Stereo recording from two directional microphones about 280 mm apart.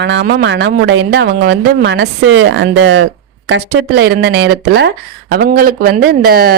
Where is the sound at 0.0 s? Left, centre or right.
Right.